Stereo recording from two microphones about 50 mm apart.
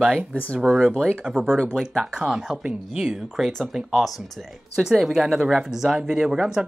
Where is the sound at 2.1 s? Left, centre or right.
Centre.